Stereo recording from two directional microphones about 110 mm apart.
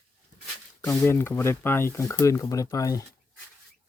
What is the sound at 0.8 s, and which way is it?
Speech, 20° left (ahead or behind).